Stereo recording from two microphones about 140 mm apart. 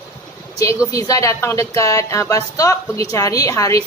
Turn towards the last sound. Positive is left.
turn(degrees=25)  # may be behind; listen again after turning